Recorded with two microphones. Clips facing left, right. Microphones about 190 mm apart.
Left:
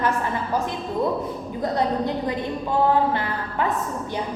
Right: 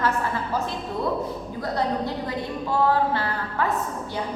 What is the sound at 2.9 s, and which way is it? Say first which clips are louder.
Speech: left 2 dB; 20° left (ahead or behind).